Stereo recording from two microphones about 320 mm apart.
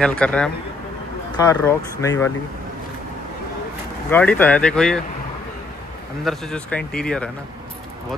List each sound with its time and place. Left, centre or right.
0.0 s speech: centre
4.1 s speech: centre
6.2 s speech: centre